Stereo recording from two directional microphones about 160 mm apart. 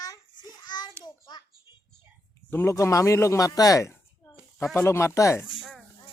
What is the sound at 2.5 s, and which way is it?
Speech, 15° left (ahead or behind).